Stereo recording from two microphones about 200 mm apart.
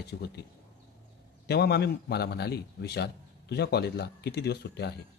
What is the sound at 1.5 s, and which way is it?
Speech, 55° left (ahead or behind).